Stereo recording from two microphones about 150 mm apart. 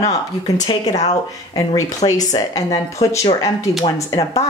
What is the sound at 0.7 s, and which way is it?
Speech, 50° left (ahead or behind).